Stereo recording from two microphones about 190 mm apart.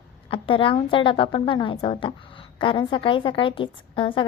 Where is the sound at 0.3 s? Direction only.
25° left (ahead or behind).